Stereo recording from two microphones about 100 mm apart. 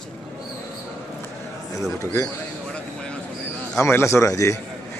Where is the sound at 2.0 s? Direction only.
30° left (ahead or behind).